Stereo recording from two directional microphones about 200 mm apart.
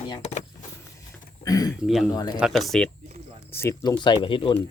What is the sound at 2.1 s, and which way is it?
Speech, 20° left (ahead or behind).